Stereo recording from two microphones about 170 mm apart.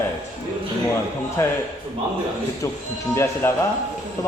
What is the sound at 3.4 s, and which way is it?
Speech, 15° left (ahead or behind).